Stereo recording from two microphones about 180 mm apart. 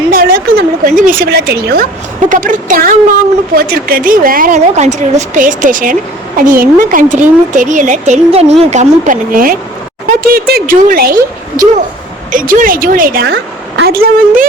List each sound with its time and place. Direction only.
0.1 s a sound: 55° right (ahead or behind)
0.9 s a woman's voice: 50° right (ahead or behind)
2.3 s a woman's voice: 45° right (ahead or behind)